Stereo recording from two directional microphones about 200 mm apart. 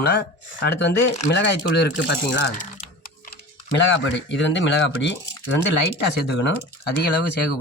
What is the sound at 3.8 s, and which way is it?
Speech, 65° left (ahead or behind).